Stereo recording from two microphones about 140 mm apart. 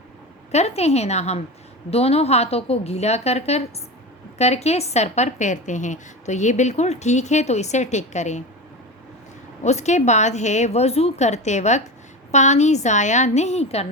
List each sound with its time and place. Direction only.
0.5 s a woman's voice: 50° left (ahead or behind)
9.6 s a woman's voice: 55° left (ahead or behind)